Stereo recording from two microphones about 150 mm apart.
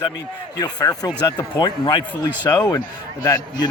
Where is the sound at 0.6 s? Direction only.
25° left (ahead or behind).